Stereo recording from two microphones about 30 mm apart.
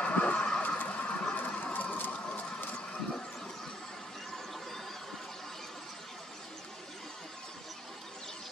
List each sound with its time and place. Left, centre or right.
0.0 s vehicle: left
0.6 s horse: left
1.3 s a sound: left